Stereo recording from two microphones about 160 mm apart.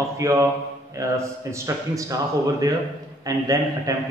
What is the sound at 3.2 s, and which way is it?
Speech, 20° right (ahead or behind).